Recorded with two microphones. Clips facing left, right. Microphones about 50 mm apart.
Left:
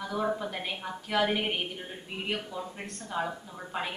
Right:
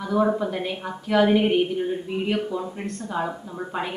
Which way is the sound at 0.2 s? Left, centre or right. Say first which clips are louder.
Right 9 dB; right.